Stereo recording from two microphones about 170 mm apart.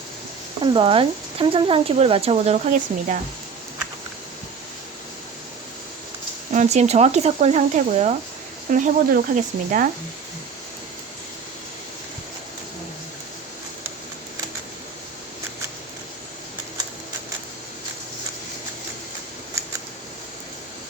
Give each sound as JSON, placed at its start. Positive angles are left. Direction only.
{"t": 0.6, "sound": "speech", "side_deg": -30}
{"t": 6.5, "sound": "speech", "side_deg": -40}